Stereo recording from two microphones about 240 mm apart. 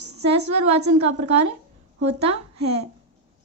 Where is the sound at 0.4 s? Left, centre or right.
Right.